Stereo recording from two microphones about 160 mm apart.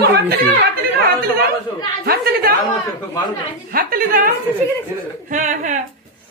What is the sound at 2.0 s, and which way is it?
Speech, 80° right.